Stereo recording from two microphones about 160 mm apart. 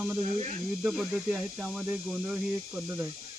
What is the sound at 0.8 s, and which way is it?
Speech, 5° right (ahead or behind).